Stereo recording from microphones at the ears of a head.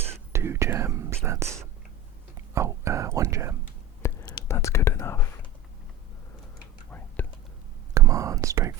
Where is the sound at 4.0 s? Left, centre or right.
Left.